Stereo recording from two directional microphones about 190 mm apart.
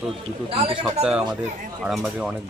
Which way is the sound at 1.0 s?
5° right (ahead or behind).